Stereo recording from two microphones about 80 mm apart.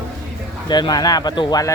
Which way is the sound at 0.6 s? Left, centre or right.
Left.